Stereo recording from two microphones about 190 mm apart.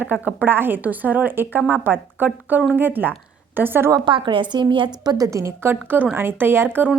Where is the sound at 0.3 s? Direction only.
10° right (ahead or behind).